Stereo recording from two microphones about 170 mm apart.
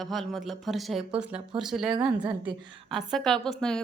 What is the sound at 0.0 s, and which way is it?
A woman's voice, centre (ahead or behind).